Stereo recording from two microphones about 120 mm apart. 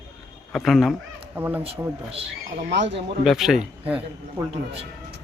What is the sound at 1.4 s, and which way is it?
Speech, 15° right (ahead or behind).